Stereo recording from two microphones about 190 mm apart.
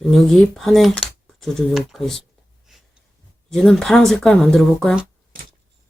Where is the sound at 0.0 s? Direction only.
Centre (ahead or behind).